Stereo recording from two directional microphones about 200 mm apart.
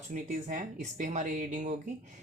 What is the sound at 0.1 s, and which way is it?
Speech, 40° right (ahead or behind).